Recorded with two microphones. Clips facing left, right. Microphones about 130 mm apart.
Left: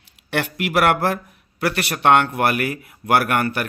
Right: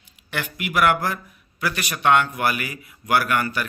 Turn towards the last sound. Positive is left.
turn(degrees=60)  # may be behind; listen again after turning